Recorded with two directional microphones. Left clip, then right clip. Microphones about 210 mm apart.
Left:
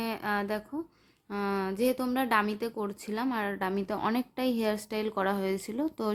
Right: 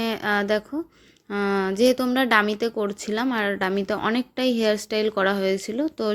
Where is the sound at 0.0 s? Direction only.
20° right (ahead or behind).